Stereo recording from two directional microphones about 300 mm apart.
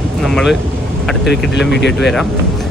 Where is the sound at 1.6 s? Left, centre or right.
Left.